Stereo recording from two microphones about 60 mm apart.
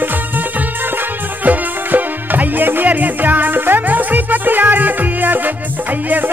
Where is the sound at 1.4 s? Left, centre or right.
Right.